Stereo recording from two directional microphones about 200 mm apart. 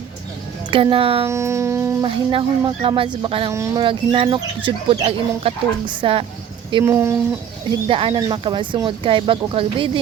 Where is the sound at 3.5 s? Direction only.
15° right (ahead or behind).